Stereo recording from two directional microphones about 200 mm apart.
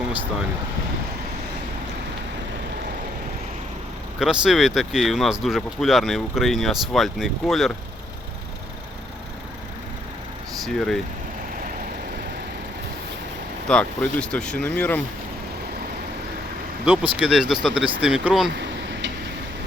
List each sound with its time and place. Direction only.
4.2 s speech: 5° right (ahead or behind)
10.8 s speech: centre (ahead or behind)
13.7 s speech: 5° left (ahead or behind)
16.8 s speech: 5° right (ahead or behind)
18.5 s a sound: 60° right (ahead or behind)